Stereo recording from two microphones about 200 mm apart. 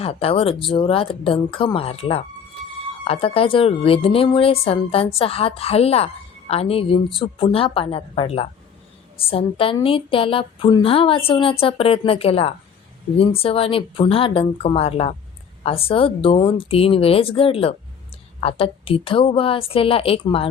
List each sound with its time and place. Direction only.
0.0 s a woman's voice: 30° left (ahead or behind)